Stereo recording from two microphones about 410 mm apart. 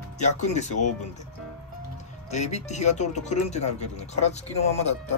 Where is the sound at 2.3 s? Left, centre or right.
Centre.